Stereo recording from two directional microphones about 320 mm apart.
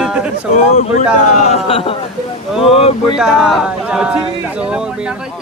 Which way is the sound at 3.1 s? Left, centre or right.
Centre.